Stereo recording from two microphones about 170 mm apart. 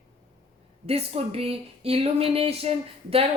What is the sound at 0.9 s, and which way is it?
Speech, 35° right (ahead or behind).